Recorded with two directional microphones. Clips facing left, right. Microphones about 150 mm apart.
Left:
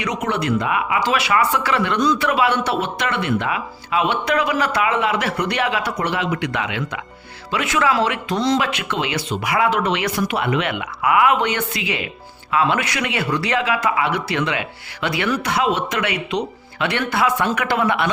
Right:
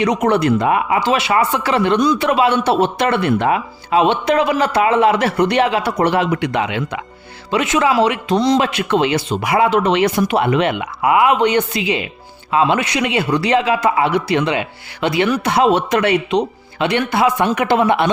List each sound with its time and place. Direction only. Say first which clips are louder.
0.0 s speech: right 8 dB; 35° right (ahead or behind)
6.4 s speech: right 5 dB; 25° right (ahead or behind)
8.6 s speech: right 7 dB; 40° right (ahead or behind)